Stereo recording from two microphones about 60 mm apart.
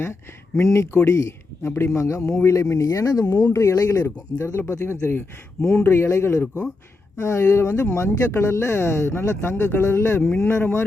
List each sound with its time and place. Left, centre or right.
0.6 s speech: left
1.6 s speech: left
3.5 s speech: left
7.2 s speech: left